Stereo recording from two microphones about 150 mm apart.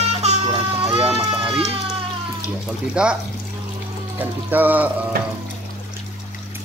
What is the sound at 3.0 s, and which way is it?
Speech, 5° right (ahead or behind).